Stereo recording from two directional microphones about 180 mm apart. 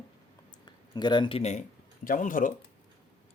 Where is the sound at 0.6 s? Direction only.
25° left (ahead or behind).